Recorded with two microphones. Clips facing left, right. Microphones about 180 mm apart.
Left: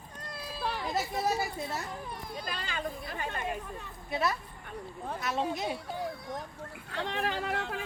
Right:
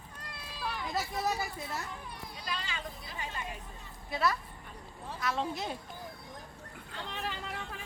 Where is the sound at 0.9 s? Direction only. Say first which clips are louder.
Left 2 dB; 25° left (ahead or behind).